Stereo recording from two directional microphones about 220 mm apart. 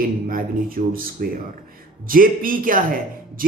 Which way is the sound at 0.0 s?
40° right (ahead or behind).